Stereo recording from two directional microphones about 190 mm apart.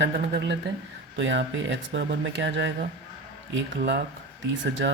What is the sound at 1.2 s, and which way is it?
Speech, 75° right (ahead or behind).